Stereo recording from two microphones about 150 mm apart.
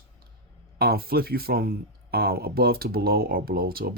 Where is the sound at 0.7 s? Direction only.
90° right.